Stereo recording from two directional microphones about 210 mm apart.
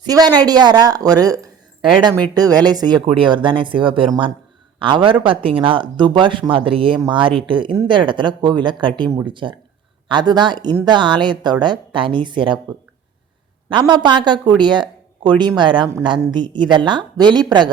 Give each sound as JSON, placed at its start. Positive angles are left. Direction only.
{"t": 0.0, "sound": "speech", "side_deg": -20}
{"t": 13.7, "sound": "speech", "side_deg": -20}